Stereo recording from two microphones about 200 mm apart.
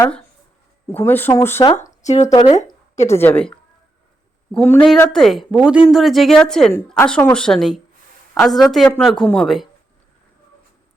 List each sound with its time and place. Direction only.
0.9 s speech: 10° left (ahead or behind)
2.0 s speech: 35° left (ahead or behind)
2.3 s speech: 20° left (ahead or behind)
3.1 s speech: 10° left (ahead or behind)